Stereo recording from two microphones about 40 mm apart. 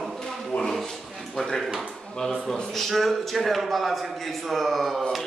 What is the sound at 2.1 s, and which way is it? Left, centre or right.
A man's voice, centre.